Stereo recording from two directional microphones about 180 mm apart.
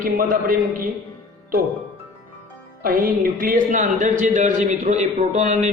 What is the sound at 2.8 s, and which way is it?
A man's voice, 50° right (ahead or behind).